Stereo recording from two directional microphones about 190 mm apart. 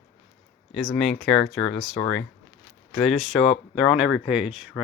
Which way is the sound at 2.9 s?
Centre (ahead or behind).